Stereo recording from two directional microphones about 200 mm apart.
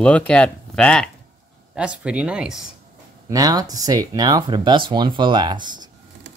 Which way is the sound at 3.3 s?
20° right (ahead or behind).